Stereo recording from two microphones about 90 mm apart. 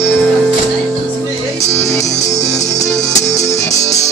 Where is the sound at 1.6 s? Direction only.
35° left (ahead or behind).